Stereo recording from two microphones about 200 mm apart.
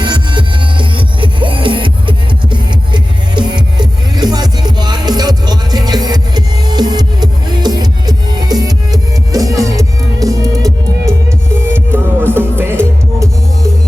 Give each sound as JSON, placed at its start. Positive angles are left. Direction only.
{"t": 0.0, "sound": "music", "side_deg": -20}